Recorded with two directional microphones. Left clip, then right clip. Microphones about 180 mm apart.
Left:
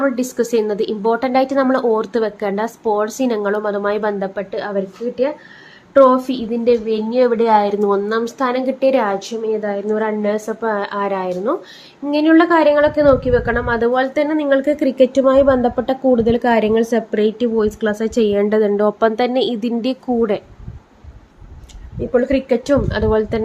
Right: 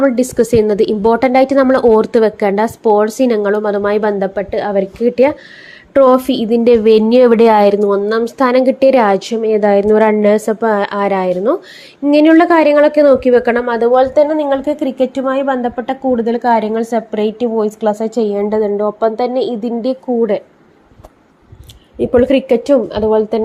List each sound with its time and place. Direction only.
0.0 s a woman's voice: 25° right (ahead or behind)
6.7 s speech: 50° right (ahead or behind)
7.7 s a woman's voice: 15° right (ahead or behind); by 13.7 s 35° right (ahead or behind)
13.7 s a woman's voice: 10° right (ahead or behind); by 20.2 s 10° left (ahead or behind)
22.0 s a woman's voice: 35° right (ahead or behind)
22.6 s a woman's voice: 10° right (ahead or behind)